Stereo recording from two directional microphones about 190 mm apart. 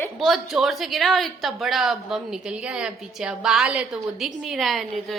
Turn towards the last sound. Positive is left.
turn(degrees=0)  # may be behind; listen again after turning